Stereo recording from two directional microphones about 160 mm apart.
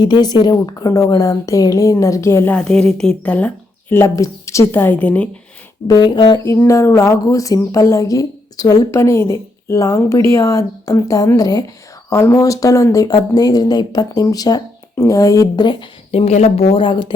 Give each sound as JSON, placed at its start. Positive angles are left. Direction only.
{"t": 0.0, "sound": "speech", "side_deg": 25}
{"t": 5.9, "sound": "speech", "side_deg": 25}